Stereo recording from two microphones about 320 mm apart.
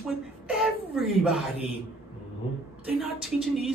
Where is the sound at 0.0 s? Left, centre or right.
Centre.